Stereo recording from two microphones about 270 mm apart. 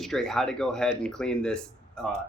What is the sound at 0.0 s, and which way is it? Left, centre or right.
Speech, centre.